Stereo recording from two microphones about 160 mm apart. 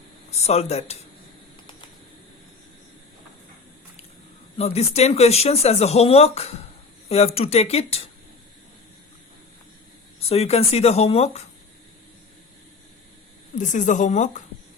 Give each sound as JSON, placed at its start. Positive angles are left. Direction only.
{"t": 0.3, "sound": "speech", "side_deg": 40}
{"t": 4.5, "sound": "speech", "side_deg": 40}
{"t": 10.2, "sound": "speech", "side_deg": 40}
{"t": 13.6, "sound": "speech", "side_deg": 50}